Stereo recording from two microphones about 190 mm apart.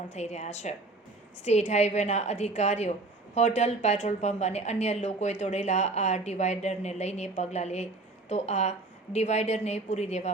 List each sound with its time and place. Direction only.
0.1 s a woman's voice: 35° left (ahead or behind)